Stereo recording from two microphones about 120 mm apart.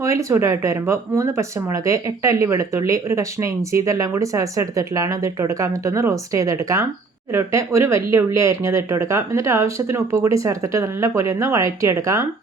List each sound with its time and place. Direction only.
0.0 s speech: 25° right (ahead or behind)